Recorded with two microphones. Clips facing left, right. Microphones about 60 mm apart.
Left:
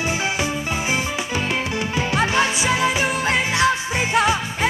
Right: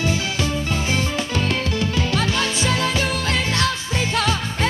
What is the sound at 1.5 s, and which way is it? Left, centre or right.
Music, centre.